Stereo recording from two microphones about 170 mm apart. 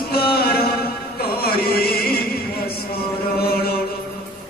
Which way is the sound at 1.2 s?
65° left (ahead or behind).